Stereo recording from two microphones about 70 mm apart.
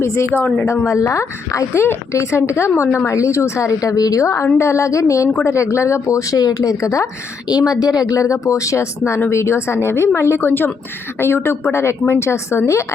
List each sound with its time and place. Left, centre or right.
0.0 s a woman's voice: left
0.3 s a woman's voice: left
0.9 s speech: left
1.5 s a woman's voice: left
7.4 s a woman's voice: left